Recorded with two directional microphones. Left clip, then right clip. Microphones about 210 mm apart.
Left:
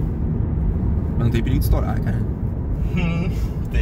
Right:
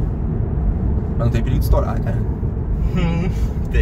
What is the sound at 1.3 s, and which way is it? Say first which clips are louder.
Speech: right 1 dB; 5° left (ahead or behind).